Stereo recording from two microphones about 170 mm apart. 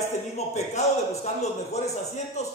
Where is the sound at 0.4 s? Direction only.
40° left (ahead or behind).